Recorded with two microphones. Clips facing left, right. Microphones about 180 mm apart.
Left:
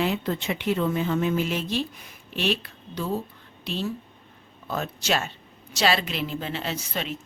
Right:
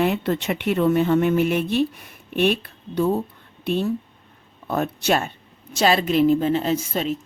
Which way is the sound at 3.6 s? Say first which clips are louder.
Right 7 dB; 55° right (ahead or behind).